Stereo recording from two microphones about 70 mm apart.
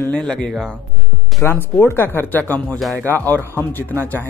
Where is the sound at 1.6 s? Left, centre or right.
Left.